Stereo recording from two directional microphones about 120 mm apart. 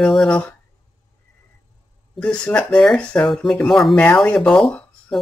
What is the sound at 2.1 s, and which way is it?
Speech, 10° left (ahead or behind).